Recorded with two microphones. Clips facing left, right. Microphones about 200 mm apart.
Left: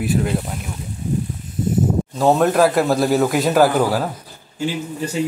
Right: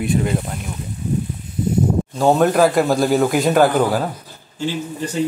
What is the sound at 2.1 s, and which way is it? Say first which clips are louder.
A man's voice: right 1 dB; centre (ahead or behind).